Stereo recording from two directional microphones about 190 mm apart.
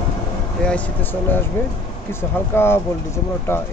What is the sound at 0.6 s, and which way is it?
Speech, 10° left (ahead or behind).